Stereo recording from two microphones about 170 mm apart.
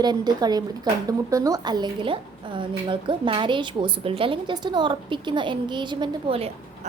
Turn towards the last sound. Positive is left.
turn(degrees=-35)  # may be behind; listen again after turning